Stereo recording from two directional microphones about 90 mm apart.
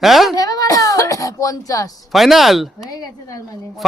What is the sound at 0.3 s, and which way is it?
Whimper, 40° left (ahead or behind).